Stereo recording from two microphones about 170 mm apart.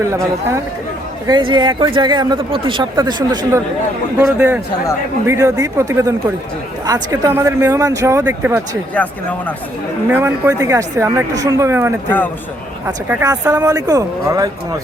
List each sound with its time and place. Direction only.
0.0 s speech: 15° right (ahead or behind)
1.3 s speech: 25° right (ahead or behind)
4.4 s speech: 10° right (ahead or behind)
10.1 s speech: 15° right (ahead or behind)
13.1 s speech: 15° right (ahead or behind)